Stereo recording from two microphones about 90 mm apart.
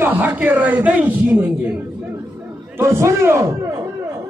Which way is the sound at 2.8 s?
30° right (ahead or behind).